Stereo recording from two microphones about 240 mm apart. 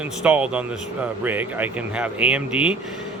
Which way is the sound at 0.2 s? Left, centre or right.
Centre.